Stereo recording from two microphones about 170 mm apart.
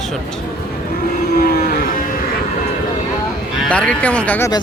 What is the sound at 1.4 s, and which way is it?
Cattle, 60° left (ahead or behind).